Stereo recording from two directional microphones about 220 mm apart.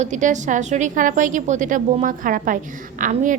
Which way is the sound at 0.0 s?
35° right (ahead or behind).